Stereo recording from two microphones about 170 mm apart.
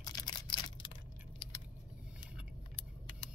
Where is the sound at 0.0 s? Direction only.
25° left (ahead or behind).